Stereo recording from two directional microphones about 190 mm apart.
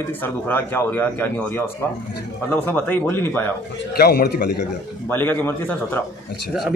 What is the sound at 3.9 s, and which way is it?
Speech, 55° left (ahead or behind).